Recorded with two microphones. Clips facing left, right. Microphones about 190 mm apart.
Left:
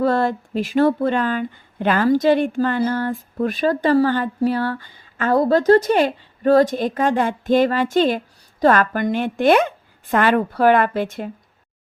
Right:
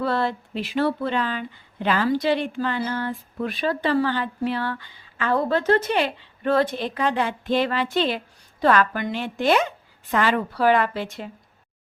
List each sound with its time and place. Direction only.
0.0 s speech: 45° left (ahead or behind)